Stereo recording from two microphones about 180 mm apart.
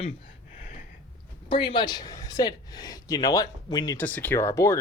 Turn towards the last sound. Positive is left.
turn(degrees=15)  # may be behind; listen again after turning